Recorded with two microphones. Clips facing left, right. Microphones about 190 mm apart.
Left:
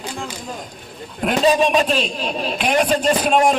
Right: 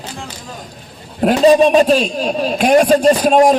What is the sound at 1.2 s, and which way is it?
A man's voice, 35° right (ahead or behind).